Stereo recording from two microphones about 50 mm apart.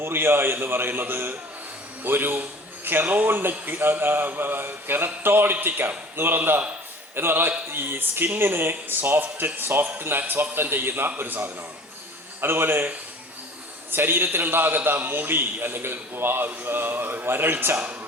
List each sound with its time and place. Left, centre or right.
0.0 s speech: right
13.9 s speech: right